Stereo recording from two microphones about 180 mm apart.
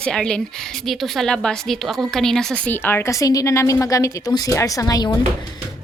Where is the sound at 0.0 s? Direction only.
5° left (ahead or behind).